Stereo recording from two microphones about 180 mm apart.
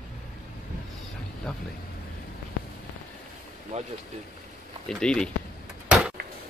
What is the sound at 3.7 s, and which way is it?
Speech, 40° right (ahead or behind).